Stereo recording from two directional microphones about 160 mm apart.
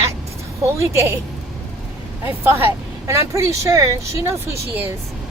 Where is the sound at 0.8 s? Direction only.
20° right (ahead or behind).